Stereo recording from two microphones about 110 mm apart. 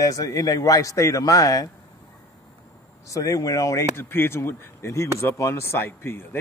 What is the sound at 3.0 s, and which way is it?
Speech, 30° left (ahead or behind).